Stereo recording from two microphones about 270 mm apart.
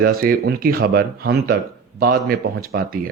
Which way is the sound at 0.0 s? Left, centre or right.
Right.